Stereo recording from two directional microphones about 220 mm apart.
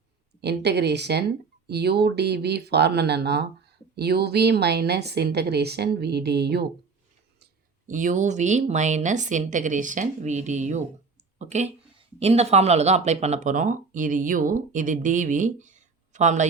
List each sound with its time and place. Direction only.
0.4 s a woman's voice: 50° right (ahead or behind)
7.9 s speech: 35° right (ahead or behind)